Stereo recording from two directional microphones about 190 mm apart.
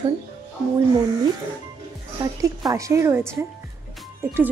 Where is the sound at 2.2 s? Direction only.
20° right (ahead or behind).